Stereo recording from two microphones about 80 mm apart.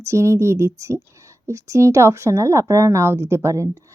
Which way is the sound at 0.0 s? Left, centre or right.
Right.